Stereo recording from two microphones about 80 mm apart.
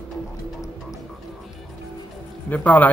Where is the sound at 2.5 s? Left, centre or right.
Centre.